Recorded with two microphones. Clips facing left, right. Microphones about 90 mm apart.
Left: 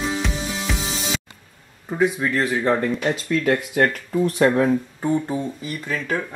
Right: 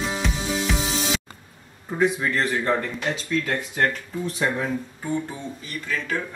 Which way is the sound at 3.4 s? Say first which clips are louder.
Left 8 dB; 55° left (ahead or behind).